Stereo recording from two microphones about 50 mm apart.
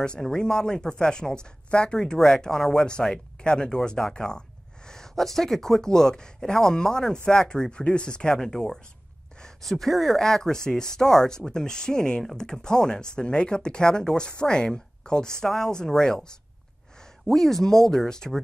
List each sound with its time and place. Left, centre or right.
0.0 s speech: centre
2.1 s speech: centre
17.3 s speech: centre